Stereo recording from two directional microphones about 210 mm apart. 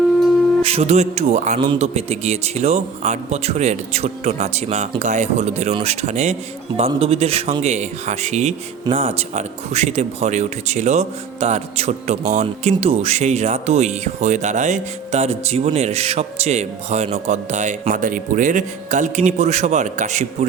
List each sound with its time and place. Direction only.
0.6 s speech: 30° right (ahead or behind)